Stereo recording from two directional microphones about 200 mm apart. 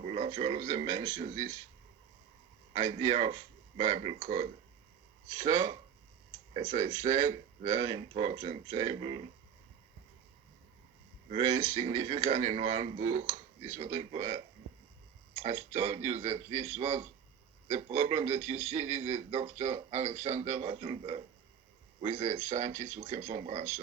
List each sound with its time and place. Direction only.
0.0 s speech: 30° right (ahead or behind)
2.8 s a man's voice: 25° right (ahead or behind)
6.5 s a man's voice: 35° right (ahead or behind)
7.9 s speech: 20° right (ahead or behind)
11.3 s a man's voice: 35° right (ahead or behind)